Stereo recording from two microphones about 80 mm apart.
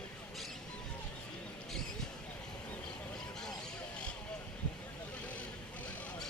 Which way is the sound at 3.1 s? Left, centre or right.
Centre.